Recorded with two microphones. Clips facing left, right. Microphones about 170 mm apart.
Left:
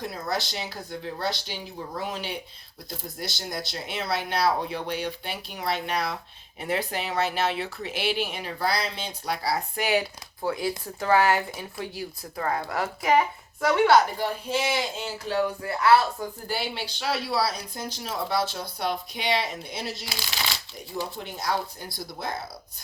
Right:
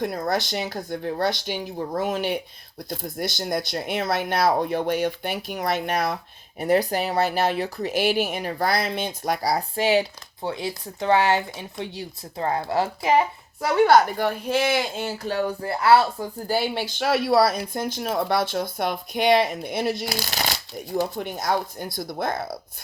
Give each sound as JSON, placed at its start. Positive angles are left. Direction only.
{"t": 0.0, "sound": "speech", "side_deg": -55}
{"t": 20.1, "sound": "speech", "side_deg": -45}